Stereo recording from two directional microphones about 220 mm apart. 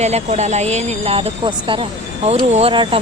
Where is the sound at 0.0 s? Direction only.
30° right (ahead or behind).